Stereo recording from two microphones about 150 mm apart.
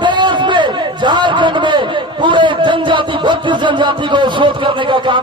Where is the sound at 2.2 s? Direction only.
35° right (ahead or behind).